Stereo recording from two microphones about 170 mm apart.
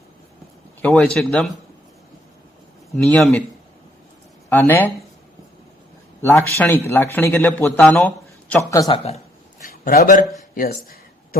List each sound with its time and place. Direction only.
0.8 s a man's voice: 5° left (ahead or behind)
2.9 s a man's voice: centre (ahead or behind)
4.4 s speech: 10° left (ahead or behind)
6.2 s a man's voice: 10° left (ahead or behind)
9.6 s speech: 60° left (ahead or behind)